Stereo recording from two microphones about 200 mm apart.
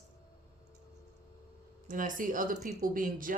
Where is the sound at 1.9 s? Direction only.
40° right (ahead or behind).